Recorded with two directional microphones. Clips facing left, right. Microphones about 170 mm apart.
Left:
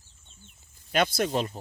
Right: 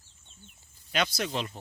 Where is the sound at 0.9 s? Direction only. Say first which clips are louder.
Left 5 dB; 50° left (ahead or behind).